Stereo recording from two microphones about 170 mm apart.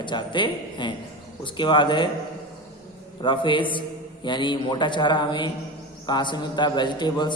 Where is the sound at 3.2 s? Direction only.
30° left (ahead or behind).